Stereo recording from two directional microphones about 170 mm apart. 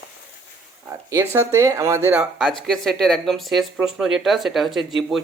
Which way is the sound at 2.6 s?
Centre (ahead or behind).